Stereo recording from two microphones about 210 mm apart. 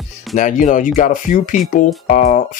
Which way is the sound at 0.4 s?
35° left (ahead or behind).